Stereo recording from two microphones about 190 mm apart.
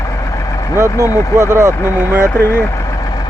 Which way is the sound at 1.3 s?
15° right (ahead or behind).